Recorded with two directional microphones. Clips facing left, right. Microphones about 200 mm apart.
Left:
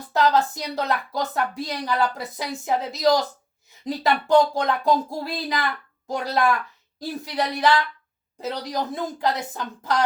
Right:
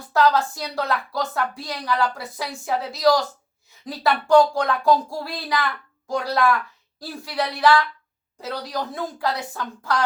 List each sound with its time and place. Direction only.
0.1 s a woman's voice: 20° left (ahead or behind)